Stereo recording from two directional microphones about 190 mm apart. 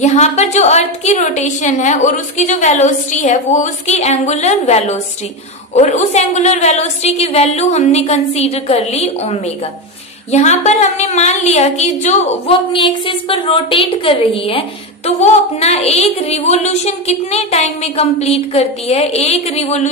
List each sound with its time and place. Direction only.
0.0 s a woman's voice: 35° left (ahead or behind)